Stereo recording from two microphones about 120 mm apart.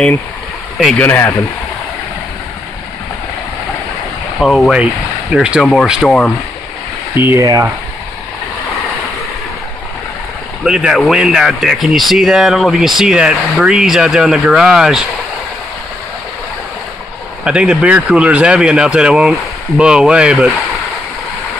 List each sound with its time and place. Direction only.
0.9 s speech: 15° left (ahead or behind)
4.4 s speech: centre (ahead or behind)
5.9 s speech: 5° left (ahead or behind)
7.2 s speech: 20° right (ahead or behind)
10.6 s speech: 5° right (ahead or behind)
17.5 s speech: 10° right (ahead or behind)